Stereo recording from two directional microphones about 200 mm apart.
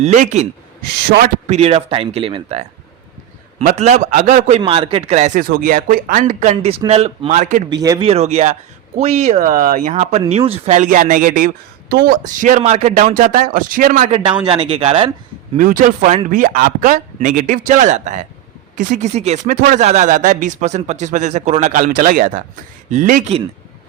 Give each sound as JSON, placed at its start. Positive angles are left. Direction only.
{"t": 0.0, "sound": "speech", "side_deg": -40}
{"t": 0.9, "sound": "a man's voice", "side_deg": -50}
{"t": 1.5, "sound": "speech", "side_deg": -30}
{"t": 4.6, "sound": "speech", "side_deg": -25}
{"t": 7.7, "sound": "speech", "side_deg": -20}
{"t": 8.0, "sound": "speech", "side_deg": -30}
{"t": 14.4, "sound": "speech", "side_deg": -25}
{"t": 15.5, "sound": "speech", "side_deg": -40}